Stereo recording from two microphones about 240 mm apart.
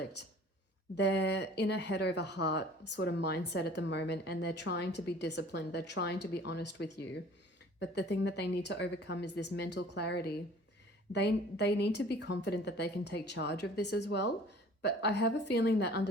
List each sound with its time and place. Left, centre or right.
0.9 s a woman's voice: left